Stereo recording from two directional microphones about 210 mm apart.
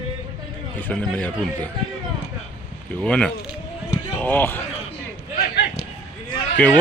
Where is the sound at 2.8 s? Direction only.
5° left (ahead or behind).